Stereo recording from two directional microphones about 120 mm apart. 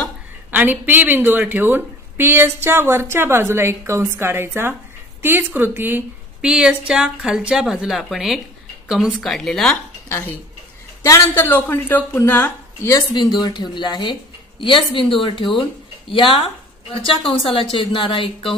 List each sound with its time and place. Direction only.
0.5 s a woman's voice: 15° right (ahead or behind); by 9.8 s 5° left (ahead or behind)
10.0 s a woman's voice: 20° left (ahead or behind)
13.1 s speech: 35° left (ahead or behind)
15.1 s a woman's voice: 45° left (ahead or behind)